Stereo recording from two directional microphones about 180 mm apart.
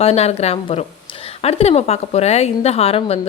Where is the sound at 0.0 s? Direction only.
35° left (ahead or behind).